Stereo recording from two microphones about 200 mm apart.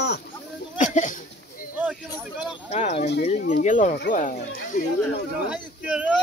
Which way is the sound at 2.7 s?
35° left (ahead or behind).